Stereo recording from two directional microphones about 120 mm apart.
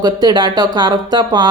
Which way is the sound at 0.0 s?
35° right (ahead or behind).